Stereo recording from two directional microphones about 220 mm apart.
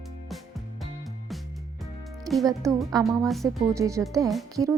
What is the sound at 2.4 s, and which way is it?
A woman's voice, 15° right (ahead or behind).